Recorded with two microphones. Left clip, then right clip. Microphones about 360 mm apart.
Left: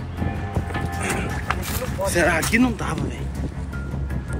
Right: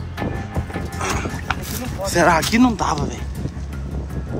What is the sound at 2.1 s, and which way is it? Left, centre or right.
Speech, centre.